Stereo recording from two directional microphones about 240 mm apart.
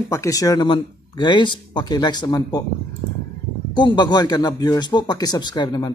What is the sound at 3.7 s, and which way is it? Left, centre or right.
Speech, centre.